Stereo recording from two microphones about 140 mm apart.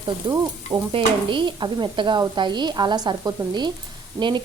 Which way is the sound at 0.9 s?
35° right (ahead or behind).